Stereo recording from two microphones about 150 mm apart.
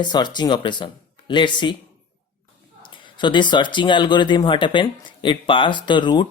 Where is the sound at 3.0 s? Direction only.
30° left (ahead or behind).